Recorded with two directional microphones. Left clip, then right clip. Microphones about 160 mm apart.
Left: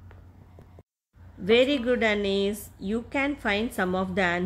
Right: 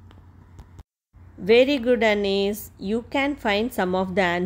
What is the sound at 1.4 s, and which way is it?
A woman's voice, 20° right (ahead or behind).